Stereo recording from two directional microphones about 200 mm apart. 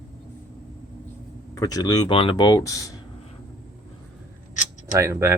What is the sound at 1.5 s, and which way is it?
Speech, 20° left (ahead or behind).